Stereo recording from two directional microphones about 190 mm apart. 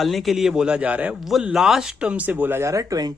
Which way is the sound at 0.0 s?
Centre (ahead or behind).